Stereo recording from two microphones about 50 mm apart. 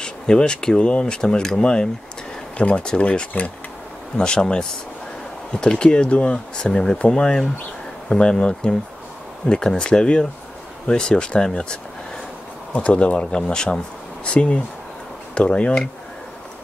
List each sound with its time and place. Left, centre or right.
0.0 s speech: centre